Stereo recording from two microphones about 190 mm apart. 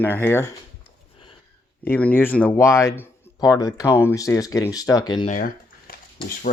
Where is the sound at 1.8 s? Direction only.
10° left (ahead or behind); by 5.3 s 25° left (ahead or behind).